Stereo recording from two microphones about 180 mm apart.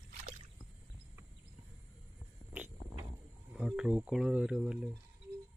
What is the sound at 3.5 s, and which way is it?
Speech, centre (ahead or behind).